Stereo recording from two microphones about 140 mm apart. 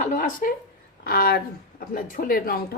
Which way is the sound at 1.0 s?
90° left.